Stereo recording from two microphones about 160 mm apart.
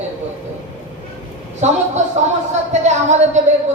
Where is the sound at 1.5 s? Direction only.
45° right (ahead or behind).